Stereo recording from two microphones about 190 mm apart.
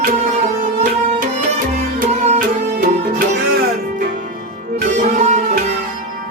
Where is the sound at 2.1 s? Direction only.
40° right (ahead or behind).